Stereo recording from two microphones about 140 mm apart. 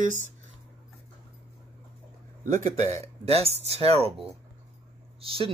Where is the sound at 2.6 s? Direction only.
50° right (ahead or behind).